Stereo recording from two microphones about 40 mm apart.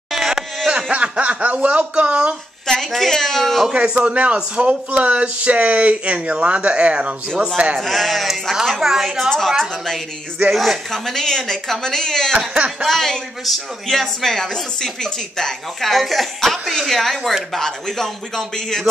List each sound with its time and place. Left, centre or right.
0.1 s a sound: centre
0.9 s speech: right
2.6 s a woman's voice: centre
3.7 s a man's voice: right
7.8 s a woman's voice: centre
8.8 s a woman's voice: centre
10.5 s a woman's voice: centre
10.9 s speech: centre
12.4 s a man's voice: right
12.8 s a woman's voice: centre